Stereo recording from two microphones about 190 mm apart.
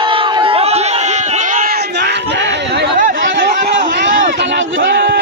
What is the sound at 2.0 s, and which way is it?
Chatter, 65° right (ahead or behind).